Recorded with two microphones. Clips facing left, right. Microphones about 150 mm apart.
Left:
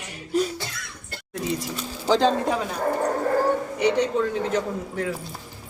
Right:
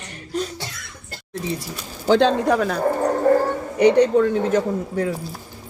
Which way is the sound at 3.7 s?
55° right (ahead or behind).